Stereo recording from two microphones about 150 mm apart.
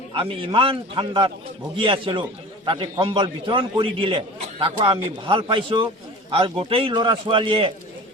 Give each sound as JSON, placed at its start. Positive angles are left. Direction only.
{"t": 0.1, "sound": "a man's voice", "side_deg": -35}